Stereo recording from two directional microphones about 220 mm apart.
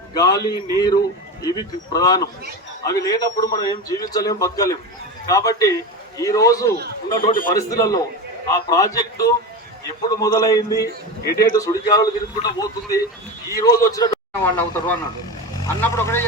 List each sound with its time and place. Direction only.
0.1 s a man's voice: 20° left (ahead or behind)